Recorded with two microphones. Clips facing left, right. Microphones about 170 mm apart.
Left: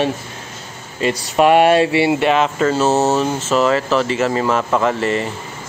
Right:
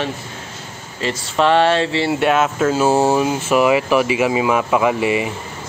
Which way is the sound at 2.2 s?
Centre (ahead or behind).